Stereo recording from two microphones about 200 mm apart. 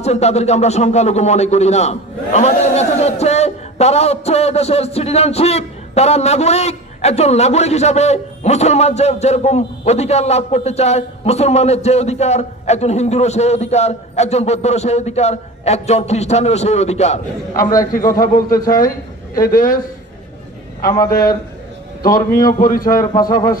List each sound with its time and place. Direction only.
0.0 s speech: 35° left (ahead or behind)
22.0 s a man's voice: 45° left (ahead or behind)